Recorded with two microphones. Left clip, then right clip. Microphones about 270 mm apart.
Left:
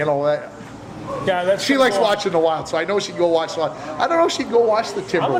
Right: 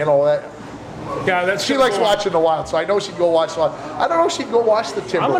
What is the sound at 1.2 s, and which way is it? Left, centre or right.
Speech, right.